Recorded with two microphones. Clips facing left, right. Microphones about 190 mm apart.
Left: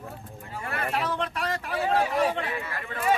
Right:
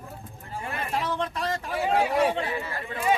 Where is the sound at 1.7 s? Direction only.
15° right (ahead or behind).